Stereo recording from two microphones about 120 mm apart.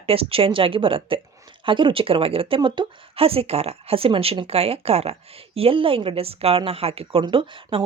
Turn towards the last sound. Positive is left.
turn(degrees=-45)  # may be behind; listen again after turning